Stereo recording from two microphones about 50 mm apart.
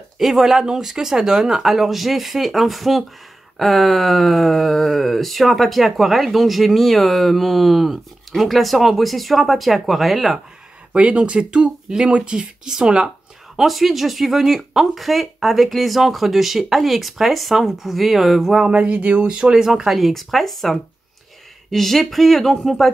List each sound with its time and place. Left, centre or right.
0.2 s speech: centre
10.9 s speech: right
13.6 s speech: centre
18.7 s speech: right
19.3 s speech: centre